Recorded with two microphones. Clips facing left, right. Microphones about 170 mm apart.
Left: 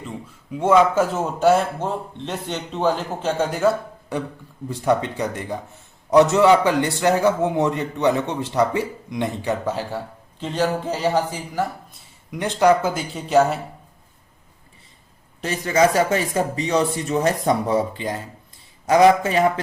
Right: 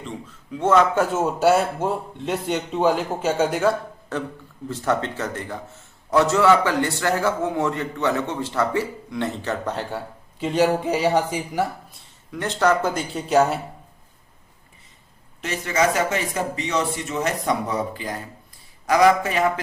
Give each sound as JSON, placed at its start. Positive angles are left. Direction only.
{"t": 0.6, "sound": "a man's voice", "side_deg": 10}
{"t": 1.0, "sound": "a man's voice", "side_deg": -5}
{"t": 4.1, "sound": "a man's voice", "side_deg": 15}
{"t": 10.4, "sound": "a man's voice", "side_deg": -10}
{"t": 12.3, "sound": "speech", "side_deg": 15}
{"t": 15.4, "sound": "a man's voice", "side_deg": 35}